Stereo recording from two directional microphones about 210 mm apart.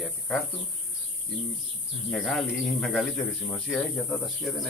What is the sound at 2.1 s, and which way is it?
A man's voice, centre (ahead or behind).